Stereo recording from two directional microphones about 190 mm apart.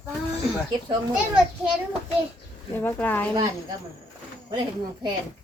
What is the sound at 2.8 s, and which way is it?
Speech, 10° left (ahead or behind).